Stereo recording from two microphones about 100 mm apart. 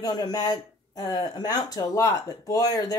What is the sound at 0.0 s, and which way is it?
Speech, 40° left (ahead or behind).